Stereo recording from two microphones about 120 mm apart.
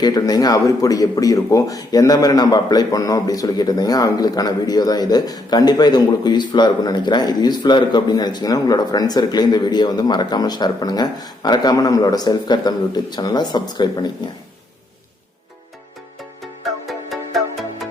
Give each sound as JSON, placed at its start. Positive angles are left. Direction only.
{"t": 0.0, "sound": "speech", "side_deg": 35}
{"t": 16.8, "sound": "music", "side_deg": 0}